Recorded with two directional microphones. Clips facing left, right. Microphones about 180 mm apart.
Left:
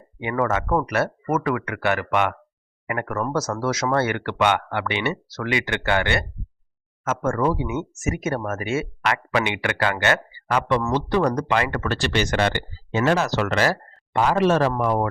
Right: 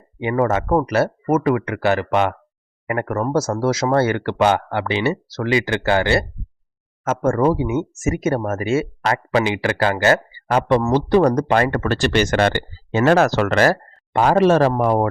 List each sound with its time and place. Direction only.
0.2 s speech: 30° right (ahead or behind)